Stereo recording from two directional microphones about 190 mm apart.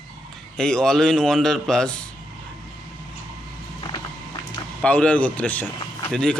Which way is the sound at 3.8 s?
25° left (ahead or behind).